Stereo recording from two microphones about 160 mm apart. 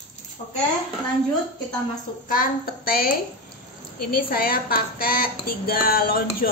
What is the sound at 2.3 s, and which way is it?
Speech, 65° left (ahead or behind).